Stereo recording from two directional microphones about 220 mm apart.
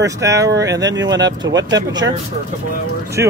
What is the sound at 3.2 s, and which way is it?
Speech, 10° right (ahead or behind).